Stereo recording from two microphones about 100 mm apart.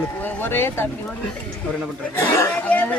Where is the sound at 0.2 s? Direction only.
20° left (ahead or behind).